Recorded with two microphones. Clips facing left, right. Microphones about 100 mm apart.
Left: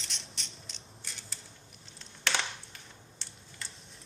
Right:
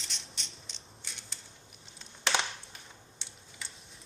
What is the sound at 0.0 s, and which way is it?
Mechanisms, centre (ahead or behind).